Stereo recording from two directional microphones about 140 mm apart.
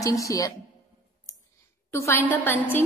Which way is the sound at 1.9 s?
20° left (ahead or behind).